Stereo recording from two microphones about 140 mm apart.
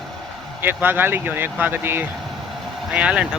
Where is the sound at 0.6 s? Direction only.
15° right (ahead or behind).